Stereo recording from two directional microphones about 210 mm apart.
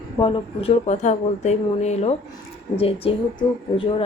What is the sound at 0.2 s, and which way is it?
A woman's voice, 25° left (ahead or behind).